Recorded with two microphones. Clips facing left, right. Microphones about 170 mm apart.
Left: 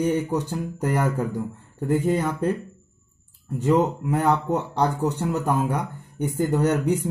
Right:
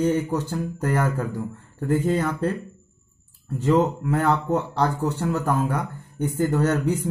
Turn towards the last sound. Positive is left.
turn(degrees=15)  # may be behind; listen again after turning